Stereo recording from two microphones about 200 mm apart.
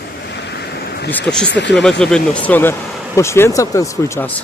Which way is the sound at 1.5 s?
60° left (ahead or behind).